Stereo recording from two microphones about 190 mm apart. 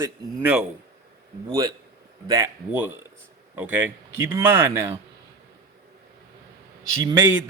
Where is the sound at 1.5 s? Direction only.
20° right (ahead or behind).